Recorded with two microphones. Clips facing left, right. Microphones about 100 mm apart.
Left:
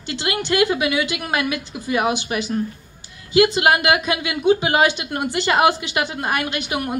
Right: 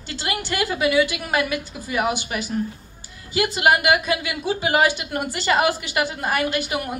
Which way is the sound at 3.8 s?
20° left (ahead or behind).